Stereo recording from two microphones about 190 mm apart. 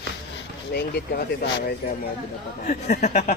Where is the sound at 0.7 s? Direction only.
55° left (ahead or behind).